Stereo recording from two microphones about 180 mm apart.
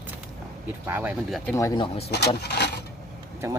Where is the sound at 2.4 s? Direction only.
65° left (ahead or behind).